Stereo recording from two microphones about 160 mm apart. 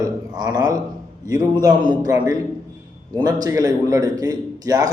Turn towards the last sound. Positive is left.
turn(degrees=-25)  # may be behind; listen again after turning